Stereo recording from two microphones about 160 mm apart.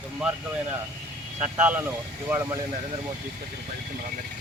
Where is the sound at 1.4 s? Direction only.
10° right (ahead or behind).